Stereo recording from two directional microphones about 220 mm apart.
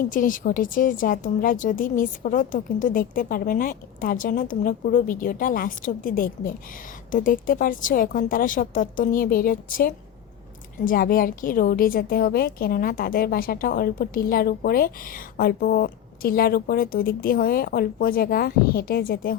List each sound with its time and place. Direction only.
0.1 s a woman's voice: 40° left (ahead or behind)